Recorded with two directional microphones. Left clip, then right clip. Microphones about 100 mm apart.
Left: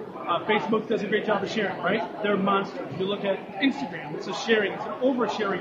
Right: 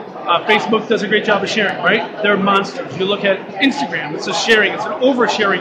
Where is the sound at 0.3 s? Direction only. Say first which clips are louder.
Right 11 dB; 15° right (ahead or behind).